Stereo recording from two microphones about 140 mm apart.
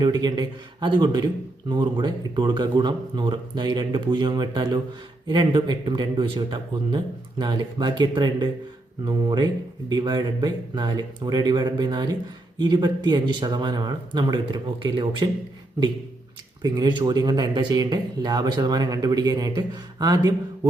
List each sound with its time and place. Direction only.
0.0 s speech: 30° right (ahead or behind)
16.6 s speech: 30° right (ahead or behind)